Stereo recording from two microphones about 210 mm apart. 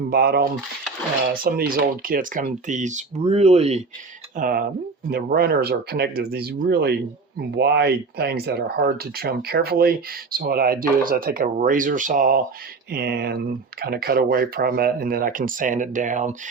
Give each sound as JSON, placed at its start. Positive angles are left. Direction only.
{"t": 0.1, "sound": "speech", "side_deg": -50}
{"t": 4.4, "sound": "speech", "side_deg": -40}